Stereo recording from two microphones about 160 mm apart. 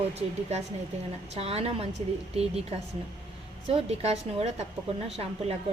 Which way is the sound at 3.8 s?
40° right (ahead or behind).